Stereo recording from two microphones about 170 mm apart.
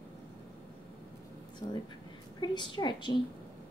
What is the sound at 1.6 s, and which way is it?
Speech, 25° left (ahead or behind).